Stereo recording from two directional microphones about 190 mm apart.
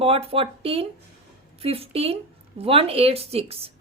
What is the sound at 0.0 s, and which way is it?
Speech, 30° right (ahead or behind).